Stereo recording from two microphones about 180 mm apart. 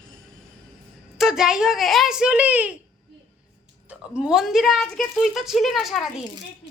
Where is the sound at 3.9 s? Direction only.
5° right (ahead or behind).